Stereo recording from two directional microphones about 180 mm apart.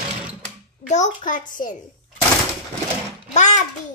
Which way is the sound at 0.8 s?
40° left (ahead or behind).